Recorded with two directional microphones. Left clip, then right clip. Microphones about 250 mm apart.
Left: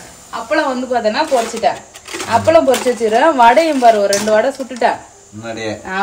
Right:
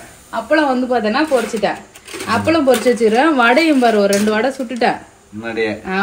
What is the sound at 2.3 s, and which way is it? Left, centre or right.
Speech, right.